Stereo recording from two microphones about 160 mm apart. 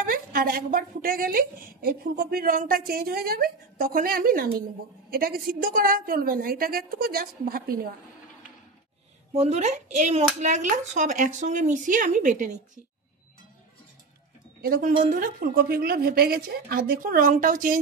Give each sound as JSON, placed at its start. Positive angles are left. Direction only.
{"t": 0.0, "sound": "a woman's voice", "side_deg": -65}
{"t": 9.3, "sound": "speech", "side_deg": -40}
{"t": 14.6, "sound": "a woman's voice", "side_deg": -65}